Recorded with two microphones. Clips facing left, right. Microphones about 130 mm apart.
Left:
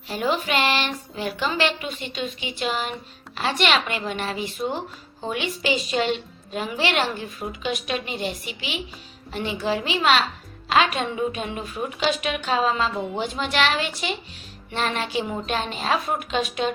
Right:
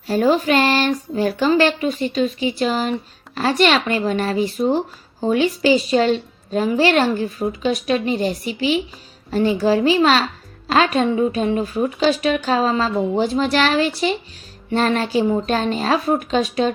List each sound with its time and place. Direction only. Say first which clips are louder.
0.1 s a woman's voice: right 8 dB; 40° right (ahead or behind)